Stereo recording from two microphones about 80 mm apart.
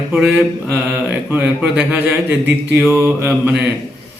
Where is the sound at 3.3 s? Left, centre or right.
Centre.